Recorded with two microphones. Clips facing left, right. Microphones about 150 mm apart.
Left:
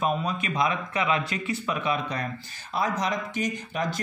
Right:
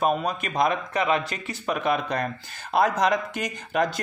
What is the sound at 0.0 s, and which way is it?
Speech, 45° right (ahead or behind).